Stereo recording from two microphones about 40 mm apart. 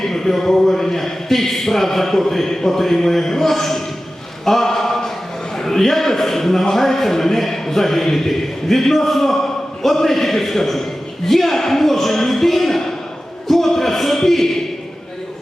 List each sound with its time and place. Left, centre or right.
0.0 s a man's voice: centre
4.4 s mantra: centre
5.5 s a man's voice: centre
13.5 s music: centre